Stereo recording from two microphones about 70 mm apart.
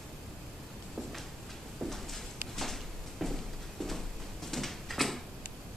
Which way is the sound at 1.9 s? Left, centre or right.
Centre.